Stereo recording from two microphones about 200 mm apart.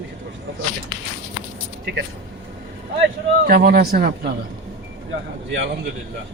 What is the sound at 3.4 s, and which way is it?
Speech, 45° right (ahead or behind).